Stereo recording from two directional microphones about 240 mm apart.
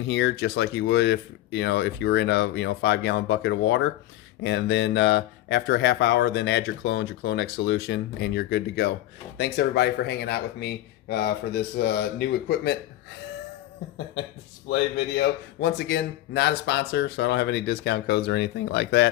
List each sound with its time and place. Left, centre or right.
0.1 s speech: left
14.7 s speech: left